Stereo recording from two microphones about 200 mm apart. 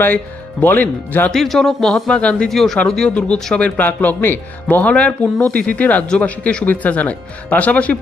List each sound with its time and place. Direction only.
0.0 s speech: 10° left (ahead or behind)